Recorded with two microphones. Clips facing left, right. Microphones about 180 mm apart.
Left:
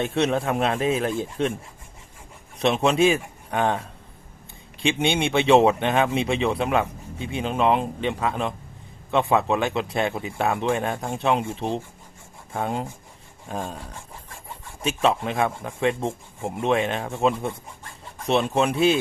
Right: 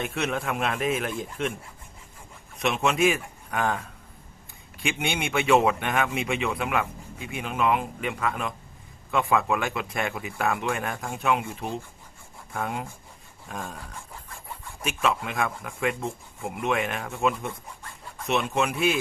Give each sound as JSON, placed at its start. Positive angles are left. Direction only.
{"t": 0.0, "sound": "a man's voice", "side_deg": 30}
{"t": 2.6, "sound": "speech", "side_deg": 30}
{"t": 14.8, "sound": "a man's voice", "side_deg": 30}